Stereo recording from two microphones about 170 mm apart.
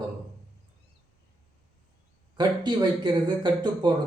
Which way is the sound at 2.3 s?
25° right (ahead or behind).